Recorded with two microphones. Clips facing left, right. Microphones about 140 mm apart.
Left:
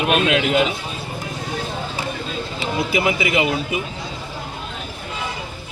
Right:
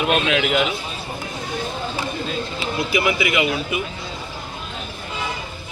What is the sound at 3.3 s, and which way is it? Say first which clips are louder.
Speech: left 1 dB; 30° left (ahead or behind).